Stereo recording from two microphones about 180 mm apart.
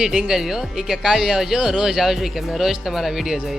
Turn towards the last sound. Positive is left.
turn(degrees=0)  # may be behind; listen again after turning